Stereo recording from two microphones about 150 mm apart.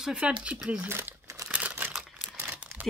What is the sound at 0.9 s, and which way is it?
Crumpling, 15° right (ahead or behind).